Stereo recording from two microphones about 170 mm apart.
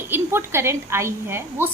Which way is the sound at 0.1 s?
15° right (ahead or behind).